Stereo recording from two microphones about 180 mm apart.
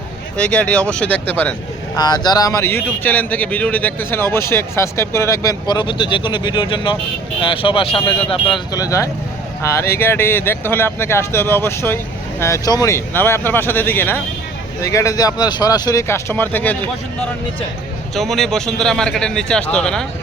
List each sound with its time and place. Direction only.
0.3 s speech: 5° left (ahead or behind)
2.0 s speech: 20° left (ahead or behind)
18.1 s a man's voice: centre (ahead or behind)